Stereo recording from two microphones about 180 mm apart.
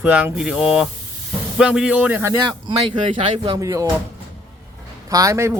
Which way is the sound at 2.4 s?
25° right (ahead or behind).